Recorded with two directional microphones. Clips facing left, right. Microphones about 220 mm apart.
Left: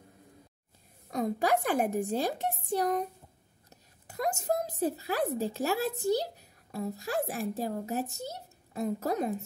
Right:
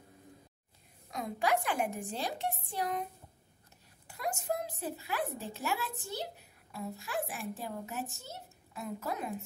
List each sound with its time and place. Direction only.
1.1 s a woman's voice: 40° left (ahead or behind)